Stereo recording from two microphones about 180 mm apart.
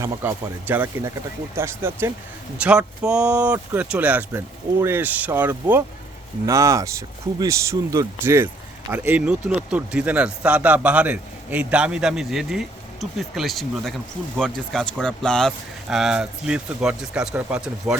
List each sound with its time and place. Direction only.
0.0 s speech: 15° right (ahead or behind)